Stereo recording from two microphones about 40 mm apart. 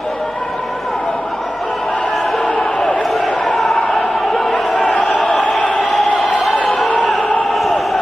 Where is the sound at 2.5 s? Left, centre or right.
Centre.